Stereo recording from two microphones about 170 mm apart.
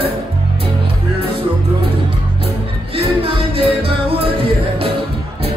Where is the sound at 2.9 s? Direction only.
35° right (ahead or behind).